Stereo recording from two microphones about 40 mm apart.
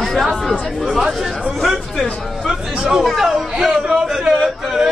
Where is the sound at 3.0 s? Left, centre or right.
Centre.